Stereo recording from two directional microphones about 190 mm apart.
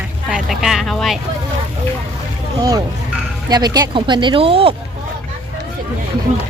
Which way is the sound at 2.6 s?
20° right (ahead or behind).